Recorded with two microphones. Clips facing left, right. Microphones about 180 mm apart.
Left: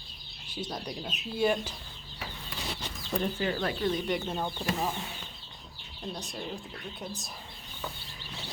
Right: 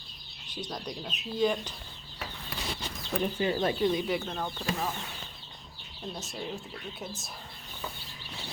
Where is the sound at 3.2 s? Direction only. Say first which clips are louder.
Right 3 dB; 20° right (ahead or behind).